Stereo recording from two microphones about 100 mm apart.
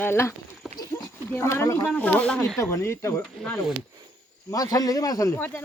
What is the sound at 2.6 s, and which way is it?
Speech, 30° left (ahead or behind).